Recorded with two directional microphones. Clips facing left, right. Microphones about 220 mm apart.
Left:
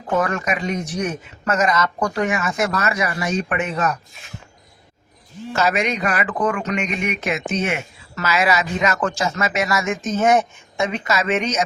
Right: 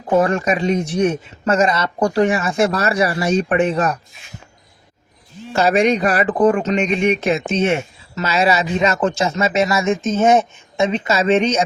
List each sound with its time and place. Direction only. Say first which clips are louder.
0.1 s speech: right 5 dB; 30° right (ahead or behind)
5.5 s speech: right 6 dB; 30° right (ahead or behind)